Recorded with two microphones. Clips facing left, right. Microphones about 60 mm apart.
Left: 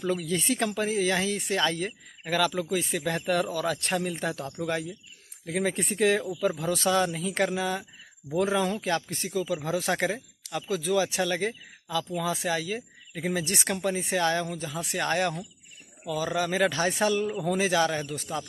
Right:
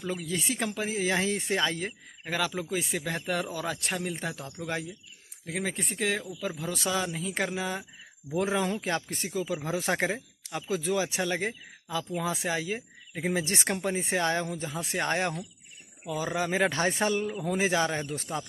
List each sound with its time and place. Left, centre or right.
0.1 s a man's voice: centre
1.2 s speech: right
1.6 s a man's voice: centre
18.1 s a man's voice: right